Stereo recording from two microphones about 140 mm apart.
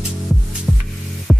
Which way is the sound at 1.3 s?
Centre (ahead or behind).